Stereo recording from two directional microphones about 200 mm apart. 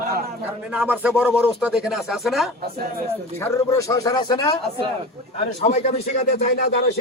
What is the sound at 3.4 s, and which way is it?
Speech, 15° left (ahead or behind).